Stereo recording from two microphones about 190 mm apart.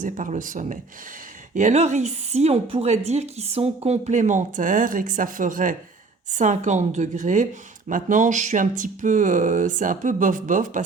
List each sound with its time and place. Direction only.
0.0 s a woman's voice: 45° right (ahead or behind)